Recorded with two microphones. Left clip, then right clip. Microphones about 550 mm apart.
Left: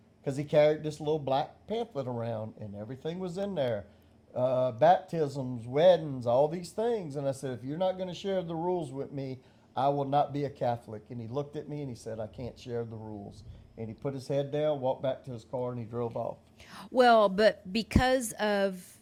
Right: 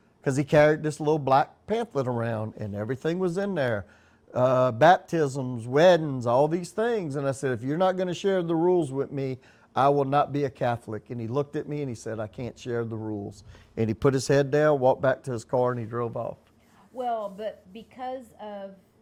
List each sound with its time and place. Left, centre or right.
0.3 s speech: right
16.9 s a woman's voice: left